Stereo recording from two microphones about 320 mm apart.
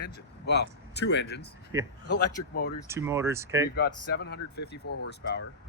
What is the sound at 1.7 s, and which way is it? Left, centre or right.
Speech, centre.